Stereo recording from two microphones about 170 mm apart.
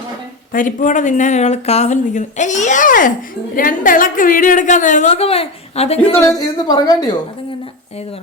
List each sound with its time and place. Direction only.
0.5 s a woman's voice: 50° left (ahead or behind)
6.1 s a woman's voice: 20° left (ahead or behind)